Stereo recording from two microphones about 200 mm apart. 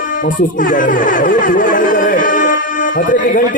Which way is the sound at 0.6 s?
40° left (ahead or behind).